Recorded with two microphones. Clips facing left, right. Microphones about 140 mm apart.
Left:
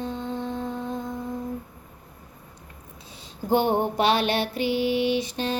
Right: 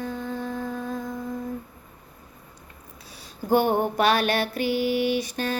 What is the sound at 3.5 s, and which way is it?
Female singing, 25° left (ahead or behind).